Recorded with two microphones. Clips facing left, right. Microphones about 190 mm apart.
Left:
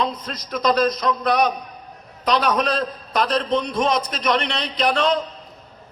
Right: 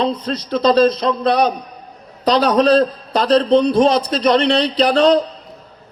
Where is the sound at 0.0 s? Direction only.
30° right (ahead or behind).